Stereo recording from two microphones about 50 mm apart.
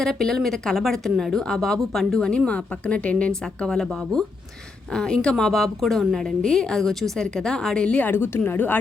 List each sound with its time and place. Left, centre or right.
0.0 s a woman's voice: centre; by 3.3 s left
3.4 s a woman's voice: centre
8.0 s a woman's voice: left